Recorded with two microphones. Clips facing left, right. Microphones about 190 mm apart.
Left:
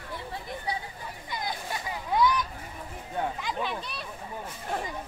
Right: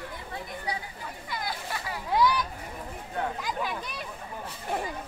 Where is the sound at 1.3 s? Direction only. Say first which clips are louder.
Left 1 dB; 20° left (ahead or behind).